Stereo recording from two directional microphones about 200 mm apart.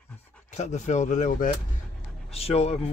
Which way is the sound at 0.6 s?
35° left (ahead or behind).